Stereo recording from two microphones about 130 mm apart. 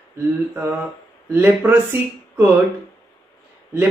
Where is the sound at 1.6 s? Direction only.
15° right (ahead or behind).